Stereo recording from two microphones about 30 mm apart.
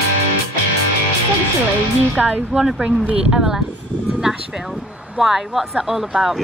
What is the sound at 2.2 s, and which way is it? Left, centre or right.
Speech, left.